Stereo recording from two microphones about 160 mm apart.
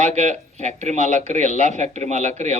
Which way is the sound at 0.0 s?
45° right (ahead or behind).